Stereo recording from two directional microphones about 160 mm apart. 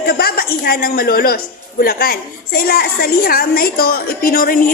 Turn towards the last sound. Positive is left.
turn(degrees=65)  # may be behind; listen again after turning